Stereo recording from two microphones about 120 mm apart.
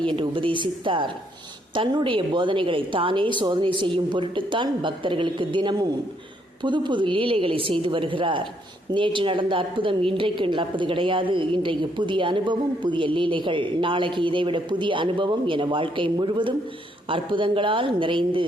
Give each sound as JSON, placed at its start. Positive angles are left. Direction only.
{"t": 0.2, "sound": "a woman's voice", "side_deg": -45}